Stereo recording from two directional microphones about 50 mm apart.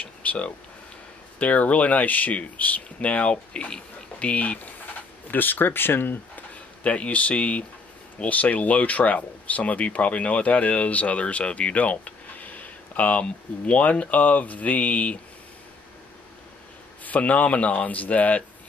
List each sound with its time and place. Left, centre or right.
0.0 s a sound: left
1.4 s speech: left
5.3 s speech: left
6.8 s speech: left
17.0 s speech: left